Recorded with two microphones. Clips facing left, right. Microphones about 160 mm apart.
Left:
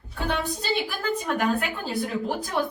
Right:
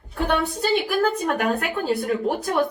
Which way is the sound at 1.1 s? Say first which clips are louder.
Right 2 dB; 65° right (ahead or behind).